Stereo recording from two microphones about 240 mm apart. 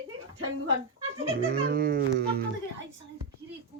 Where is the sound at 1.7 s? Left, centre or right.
Right.